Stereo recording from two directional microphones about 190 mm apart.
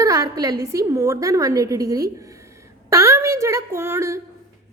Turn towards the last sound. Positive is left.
turn(degrees=-15)  # may be behind; listen again after turning